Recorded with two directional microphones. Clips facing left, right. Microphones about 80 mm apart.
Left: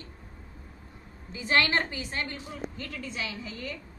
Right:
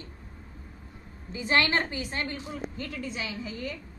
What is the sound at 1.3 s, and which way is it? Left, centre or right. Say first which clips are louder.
A woman's voice: even; right.